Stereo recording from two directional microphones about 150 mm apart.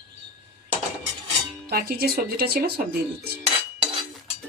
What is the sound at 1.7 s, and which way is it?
Speech, 90° right.